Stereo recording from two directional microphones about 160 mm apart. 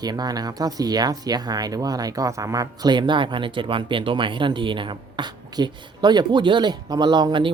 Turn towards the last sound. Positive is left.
turn(degrees=-30)  # may be behind; listen again after turning